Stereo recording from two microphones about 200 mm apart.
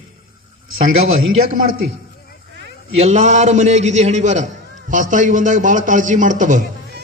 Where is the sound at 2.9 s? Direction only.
35° right (ahead or behind).